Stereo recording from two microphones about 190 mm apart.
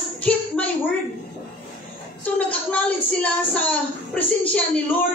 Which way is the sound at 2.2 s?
5° left (ahead or behind).